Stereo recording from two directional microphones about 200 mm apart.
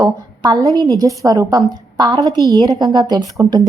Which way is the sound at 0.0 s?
15° right (ahead or behind).